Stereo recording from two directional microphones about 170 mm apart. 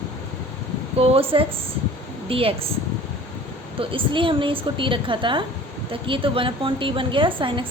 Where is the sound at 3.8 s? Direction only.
30° right (ahead or behind).